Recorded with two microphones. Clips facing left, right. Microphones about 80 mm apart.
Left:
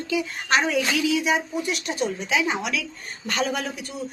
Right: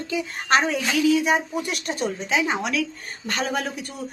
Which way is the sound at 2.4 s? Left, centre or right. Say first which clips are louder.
Right 2 dB; right.